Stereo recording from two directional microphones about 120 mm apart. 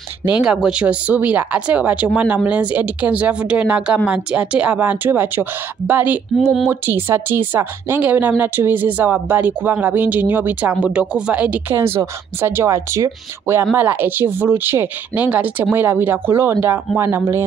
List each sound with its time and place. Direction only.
0.4 s a woman's voice: 5° right (ahead or behind)